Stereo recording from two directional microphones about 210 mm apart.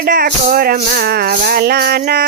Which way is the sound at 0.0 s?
45° right (ahead or behind).